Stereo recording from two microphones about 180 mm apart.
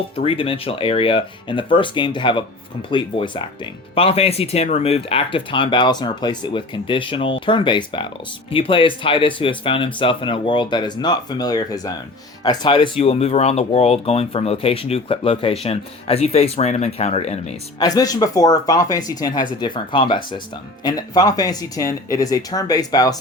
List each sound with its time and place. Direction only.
0.2 s speech: 30° left (ahead or behind)
17.7 s speech: 20° left (ahead or behind)